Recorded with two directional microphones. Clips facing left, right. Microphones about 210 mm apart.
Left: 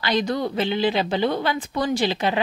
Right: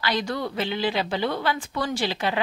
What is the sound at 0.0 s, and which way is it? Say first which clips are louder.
A woman's voice: left 4 dB; 20° left (ahead or behind).